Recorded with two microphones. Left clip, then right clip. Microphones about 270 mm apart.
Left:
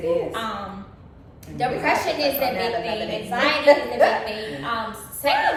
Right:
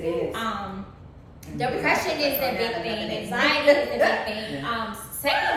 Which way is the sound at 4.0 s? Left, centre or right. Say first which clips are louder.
Left 4 dB; centre.